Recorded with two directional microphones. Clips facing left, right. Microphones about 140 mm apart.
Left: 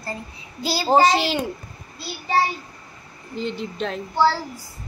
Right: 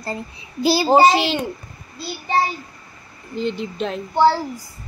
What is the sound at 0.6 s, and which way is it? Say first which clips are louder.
Speech: right 8 dB; 15° right (ahead or behind).